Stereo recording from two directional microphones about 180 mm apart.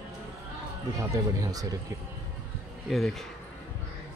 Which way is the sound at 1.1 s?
20° right (ahead or behind).